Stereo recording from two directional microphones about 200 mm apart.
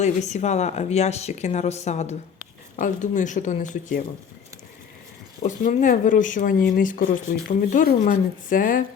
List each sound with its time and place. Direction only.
0.0 s speech: 35° left (ahead or behind)
5.4 s speech: 40° left (ahead or behind)